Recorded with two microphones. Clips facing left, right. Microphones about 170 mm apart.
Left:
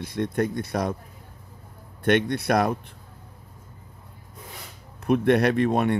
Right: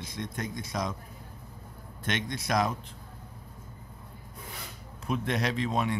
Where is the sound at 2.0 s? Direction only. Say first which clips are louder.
Left 11 dB; 60° left (ahead or behind).